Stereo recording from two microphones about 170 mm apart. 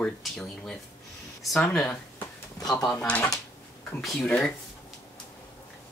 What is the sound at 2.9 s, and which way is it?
Speech, 5° left (ahead or behind).